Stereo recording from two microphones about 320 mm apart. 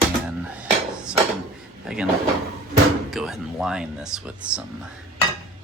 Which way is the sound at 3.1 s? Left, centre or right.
Centre.